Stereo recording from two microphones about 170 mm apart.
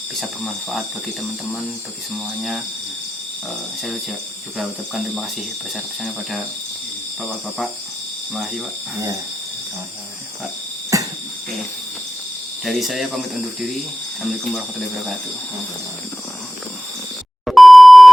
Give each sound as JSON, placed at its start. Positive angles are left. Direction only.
{"t": 0.2, "sound": "speech", "side_deg": 0}
{"t": 5.7, "sound": "speech", "side_deg": 0}
{"t": 10.9, "sound": "a sound", "side_deg": -20}
{"t": 12.6, "sound": "speech", "side_deg": 0}
{"t": 17.4, "sound": "beep", "side_deg": 0}